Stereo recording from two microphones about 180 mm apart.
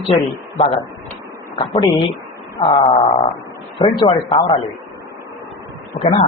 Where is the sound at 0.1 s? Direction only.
30° left (ahead or behind).